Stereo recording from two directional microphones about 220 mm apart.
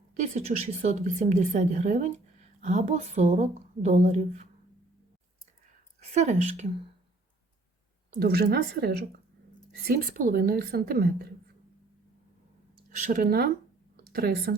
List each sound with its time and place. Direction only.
0.2 s a woman's voice: 30° right (ahead or behind)
6.0 s a woman's voice: 30° right (ahead or behind)
8.1 s a woman's voice: 45° right (ahead or behind)
13.0 s a woman's voice: 40° right (ahead or behind)
13.9 s a sound: 45° right (ahead or behind)